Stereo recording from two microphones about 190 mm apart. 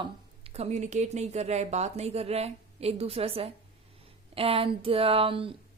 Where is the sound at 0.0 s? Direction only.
30° right (ahead or behind).